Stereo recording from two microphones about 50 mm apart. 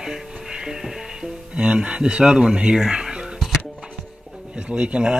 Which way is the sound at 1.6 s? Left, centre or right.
Centre.